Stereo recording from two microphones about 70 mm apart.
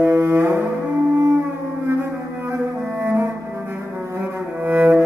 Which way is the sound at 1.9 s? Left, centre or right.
Right.